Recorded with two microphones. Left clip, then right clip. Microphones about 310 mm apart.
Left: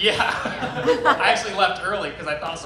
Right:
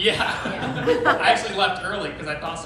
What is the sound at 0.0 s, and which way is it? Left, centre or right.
A man's voice, centre.